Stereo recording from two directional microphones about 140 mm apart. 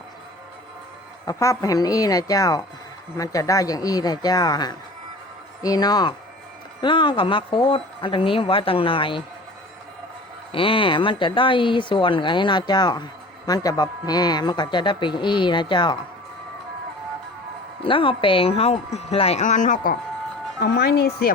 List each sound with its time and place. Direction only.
1.2 s speech: 25° left (ahead or behind)
10.5 s speech: 40° left (ahead or behind)
17.8 s speech: 40° left (ahead or behind); by 20.0 s 80° left